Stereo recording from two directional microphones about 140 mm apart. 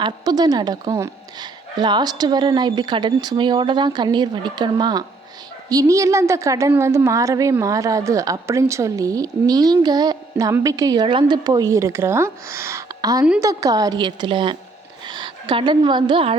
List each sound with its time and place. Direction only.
0.0 s a woman's voice: 30° right (ahead or behind)